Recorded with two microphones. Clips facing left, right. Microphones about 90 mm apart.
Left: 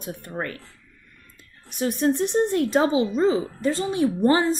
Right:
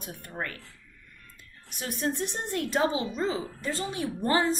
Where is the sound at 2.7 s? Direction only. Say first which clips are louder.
Left 7 dB; 30° left (ahead or behind).